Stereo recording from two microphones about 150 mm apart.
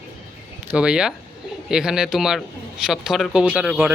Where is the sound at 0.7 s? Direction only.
5° right (ahead or behind).